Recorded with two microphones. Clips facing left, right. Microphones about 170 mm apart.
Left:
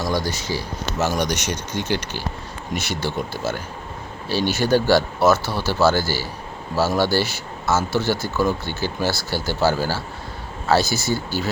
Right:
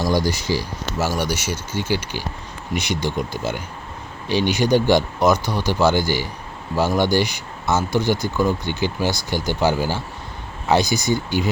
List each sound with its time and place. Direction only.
0.0 s speech: 10° right (ahead or behind)